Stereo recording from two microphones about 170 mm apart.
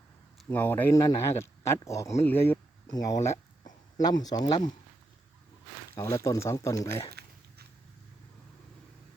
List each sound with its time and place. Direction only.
0.4 s speech: 10° left (ahead or behind)
2.8 s speech: 20° left (ahead or behind)
5.9 s speech: 15° left (ahead or behind)
7.1 s a sound: 65° right (ahead or behind)